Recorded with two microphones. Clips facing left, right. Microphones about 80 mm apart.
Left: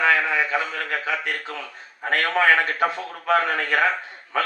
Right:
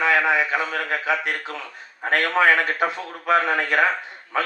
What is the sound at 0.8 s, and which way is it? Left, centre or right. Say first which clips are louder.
A man's voice: right 3 dB; right.